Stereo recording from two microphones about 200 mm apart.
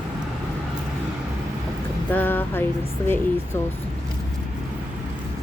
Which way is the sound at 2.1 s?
10° left (ahead or behind).